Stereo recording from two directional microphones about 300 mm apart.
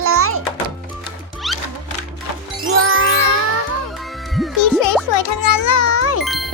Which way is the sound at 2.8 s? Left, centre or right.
Right.